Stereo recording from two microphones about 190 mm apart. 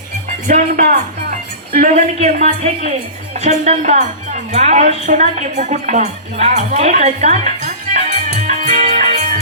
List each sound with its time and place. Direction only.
0.4 s a woman's voice: 45° right (ahead or behind)
8.4 s music: 40° right (ahead or behind)